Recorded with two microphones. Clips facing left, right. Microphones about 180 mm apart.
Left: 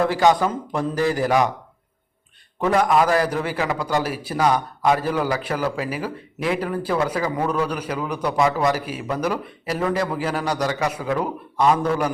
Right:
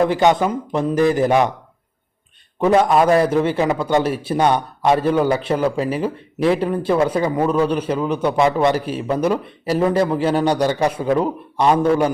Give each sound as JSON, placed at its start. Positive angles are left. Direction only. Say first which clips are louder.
{"t": 0.0, "sound": "a man's voice", "louder": "right 2 dB", "side_deg": -20}
{"t": 2.6, "sound": "a man's voice", "louder": "right 4 dB", "side_deg": -25}